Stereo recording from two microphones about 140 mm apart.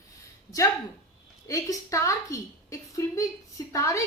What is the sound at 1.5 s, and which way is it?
A woman's voice, 25° left (ahead or behind).